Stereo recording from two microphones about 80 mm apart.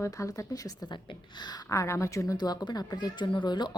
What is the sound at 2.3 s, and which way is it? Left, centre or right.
A woman's voice, left.